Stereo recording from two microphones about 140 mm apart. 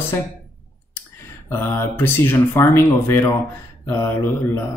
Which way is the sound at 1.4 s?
15° left (ahead or behind).